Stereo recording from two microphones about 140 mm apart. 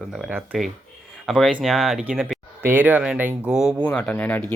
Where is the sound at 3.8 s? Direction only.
10° left (ahead or behind).